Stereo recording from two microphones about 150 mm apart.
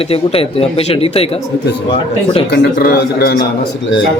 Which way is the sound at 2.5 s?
85° left.